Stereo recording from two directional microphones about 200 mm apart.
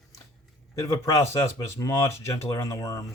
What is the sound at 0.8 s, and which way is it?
Speech, 15° left (ahead or behind).